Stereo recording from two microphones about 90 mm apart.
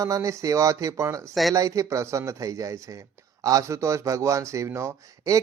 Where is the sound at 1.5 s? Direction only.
35° right (ahead or behind).